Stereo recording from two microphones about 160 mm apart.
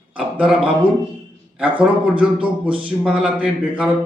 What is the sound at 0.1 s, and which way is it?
Speech, 5° right (ahead or behind).